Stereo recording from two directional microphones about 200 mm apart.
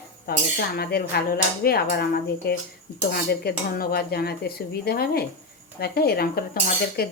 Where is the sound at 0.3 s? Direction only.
50° left (ahead or behind).